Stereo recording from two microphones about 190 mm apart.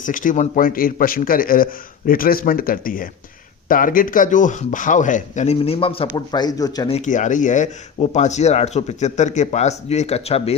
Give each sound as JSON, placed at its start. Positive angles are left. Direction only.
{"t": 0.0, "sound": "a man's voice", "side_deg": 45}
{"t": 6.9, "sound": "speech", "side_deg": 40}